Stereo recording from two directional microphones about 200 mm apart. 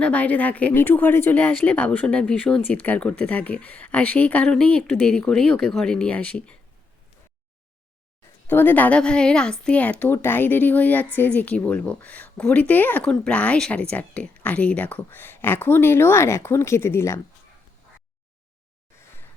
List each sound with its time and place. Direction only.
0.0 s a woman's voice: 5° left (ahead or behind)
8.4 s a woman's voice: 10° left (ahead or behind)